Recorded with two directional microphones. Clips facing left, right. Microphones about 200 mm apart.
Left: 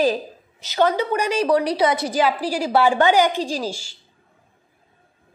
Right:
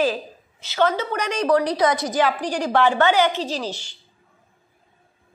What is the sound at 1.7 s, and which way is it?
Speech, 30° left (ahead or behind).